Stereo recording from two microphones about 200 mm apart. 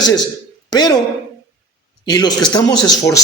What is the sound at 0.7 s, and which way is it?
Speech, 20° left (ahead or behind).